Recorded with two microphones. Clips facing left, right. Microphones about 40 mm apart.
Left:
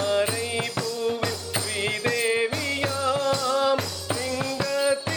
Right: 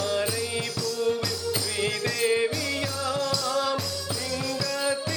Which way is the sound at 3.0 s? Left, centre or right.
Left.